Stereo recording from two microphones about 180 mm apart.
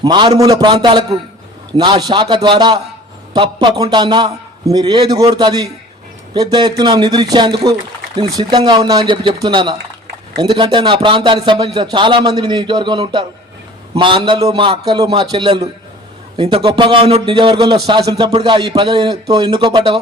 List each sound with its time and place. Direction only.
0.0 s a man's voice: 25° right (ahead or behind)